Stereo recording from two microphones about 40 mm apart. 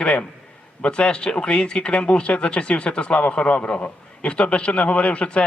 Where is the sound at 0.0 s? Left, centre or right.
Left.